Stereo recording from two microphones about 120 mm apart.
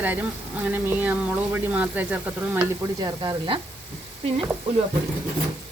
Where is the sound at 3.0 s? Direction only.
35° right (ahead or behind).